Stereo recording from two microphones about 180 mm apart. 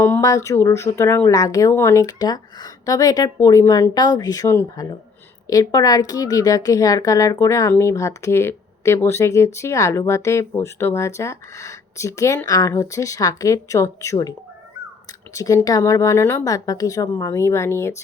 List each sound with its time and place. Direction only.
0.0 s a woman's voice: 15° left (ahead or behind)